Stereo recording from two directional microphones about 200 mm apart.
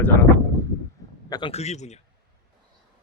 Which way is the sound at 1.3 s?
25° left (ahead or behind).